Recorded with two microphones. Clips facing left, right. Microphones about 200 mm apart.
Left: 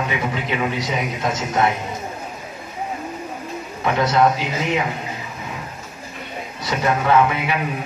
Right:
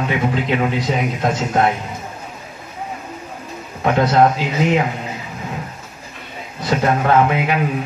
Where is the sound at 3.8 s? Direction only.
50° right (ahead or behind).